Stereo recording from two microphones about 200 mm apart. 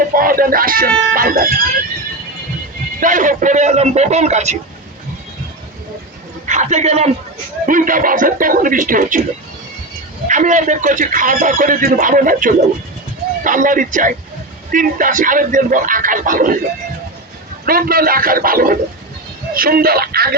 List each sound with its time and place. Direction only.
0.1 s speech: 45° right (ahead or behind)
3.0 s speech: 40° right (ahead or behind)
6.5 s speech: 35° right (ahead or behind)
10.2 s speech: 40° right (ahead or behind)
17.7 s speech: 45° right (ahead or behind)